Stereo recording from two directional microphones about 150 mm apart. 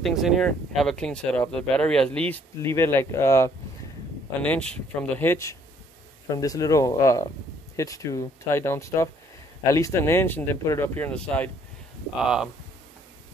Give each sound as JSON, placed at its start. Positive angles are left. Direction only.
{"t": 0.0, "sound": "speech", "side_deg": 0}
{"t": 4.4, "sound": "speech", "side_deg": 5}
{"t": 12.2, "sound": "speech", "side_deg": -5}